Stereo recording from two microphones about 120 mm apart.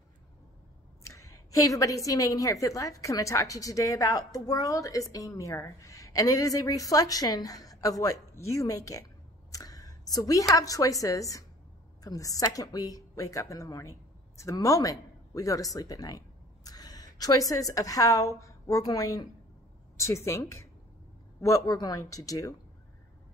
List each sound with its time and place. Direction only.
1.0 s a woman's voice: 25° left (ahead or behind)
9.5 s a sound: 30° left (ahead or behind)
10.5 s a woman's voice: 30° left (ahead or behind)